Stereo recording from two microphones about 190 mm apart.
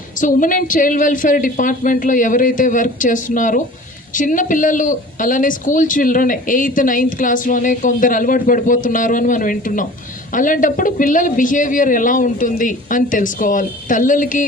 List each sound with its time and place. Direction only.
0.2 s speech: 45° left (ahead or behind)